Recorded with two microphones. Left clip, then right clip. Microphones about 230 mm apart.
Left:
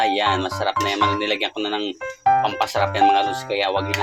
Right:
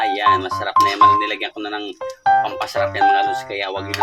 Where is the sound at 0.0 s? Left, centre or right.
Centre.